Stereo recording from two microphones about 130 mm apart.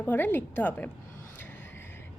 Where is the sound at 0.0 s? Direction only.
15° left (ahead or behind).